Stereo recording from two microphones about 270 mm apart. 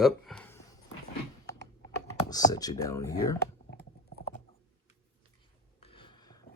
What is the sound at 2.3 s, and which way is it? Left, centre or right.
Speech, centre.